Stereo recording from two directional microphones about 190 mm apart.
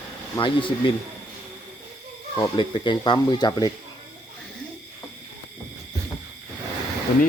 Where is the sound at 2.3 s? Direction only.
20° left (ahead or behind).